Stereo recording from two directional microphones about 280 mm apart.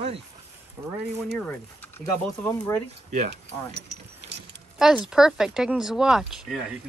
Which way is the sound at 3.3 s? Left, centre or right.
Right.